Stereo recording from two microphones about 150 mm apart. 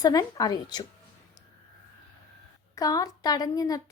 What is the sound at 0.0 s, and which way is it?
Speech, 25° left (ahead or behind).